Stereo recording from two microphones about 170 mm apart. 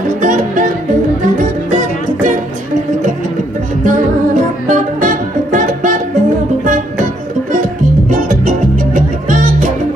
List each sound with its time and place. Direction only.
0.2 s music: 45° right (ahead or behind)
4.6 s music: 50° right (ahead or behind)
8.1 s music: 45° right (ahead or behind)